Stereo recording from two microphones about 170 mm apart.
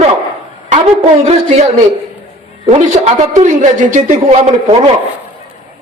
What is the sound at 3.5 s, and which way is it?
A woman's voice, 50° right (ahead or behind).